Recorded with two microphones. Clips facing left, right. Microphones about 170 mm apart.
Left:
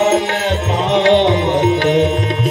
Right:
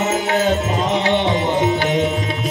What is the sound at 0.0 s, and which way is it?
Music, 80° left.